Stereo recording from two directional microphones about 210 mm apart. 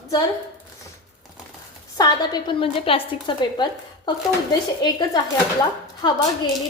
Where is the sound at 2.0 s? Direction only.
20° left (ahead or behind).